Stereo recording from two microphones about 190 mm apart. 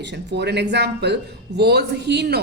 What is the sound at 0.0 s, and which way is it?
A woman's voice, 65° right (ahead or behind).